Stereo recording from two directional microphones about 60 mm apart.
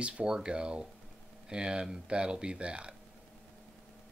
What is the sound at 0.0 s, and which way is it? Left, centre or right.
Speech, centre.